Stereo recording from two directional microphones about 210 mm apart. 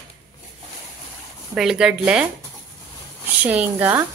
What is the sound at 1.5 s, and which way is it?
Speech, centre (ahead or behind).